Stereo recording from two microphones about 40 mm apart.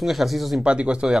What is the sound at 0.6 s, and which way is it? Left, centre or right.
Speech, right.